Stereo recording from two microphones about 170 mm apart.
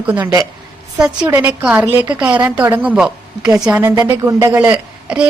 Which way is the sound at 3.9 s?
20° right (ahead or behind).